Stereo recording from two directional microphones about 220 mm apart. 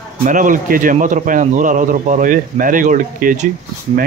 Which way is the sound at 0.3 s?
35° right (ahead or behind).